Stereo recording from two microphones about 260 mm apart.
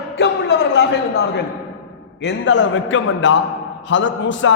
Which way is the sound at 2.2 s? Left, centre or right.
Left.